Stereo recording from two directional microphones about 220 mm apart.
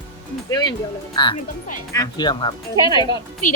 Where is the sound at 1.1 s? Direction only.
20° left (ahead or behind).